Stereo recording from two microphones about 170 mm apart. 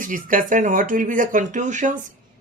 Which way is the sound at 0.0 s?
50° right (ahead or behind).